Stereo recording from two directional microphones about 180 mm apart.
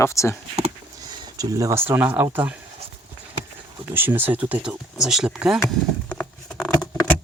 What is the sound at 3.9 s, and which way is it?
Speech, 10° right (ahead or behind).